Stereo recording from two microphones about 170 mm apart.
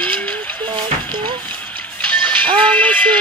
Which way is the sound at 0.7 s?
25° right (ahead or behind).